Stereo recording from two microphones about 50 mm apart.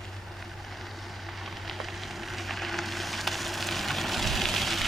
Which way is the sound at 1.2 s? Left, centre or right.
Centre.